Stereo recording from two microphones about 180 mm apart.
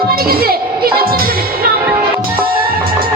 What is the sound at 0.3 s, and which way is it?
Music, 55° right (ahead or behind).